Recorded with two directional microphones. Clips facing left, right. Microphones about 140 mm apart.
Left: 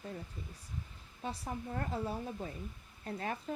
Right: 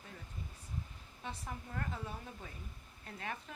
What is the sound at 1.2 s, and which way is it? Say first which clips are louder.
Speech: left 5 dB; 35° left (ahead or behind).